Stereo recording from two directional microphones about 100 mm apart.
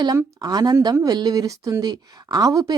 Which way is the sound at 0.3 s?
40° right (ahead or behind).